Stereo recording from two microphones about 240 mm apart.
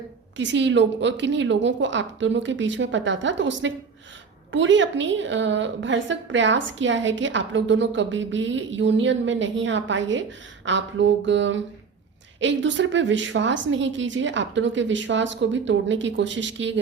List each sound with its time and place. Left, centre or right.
0.3 s a woman's voice: right